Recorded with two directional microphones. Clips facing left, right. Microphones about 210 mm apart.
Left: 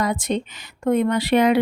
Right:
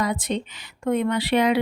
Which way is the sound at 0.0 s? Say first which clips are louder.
Left 2 dB; 45° left (ahead or behind).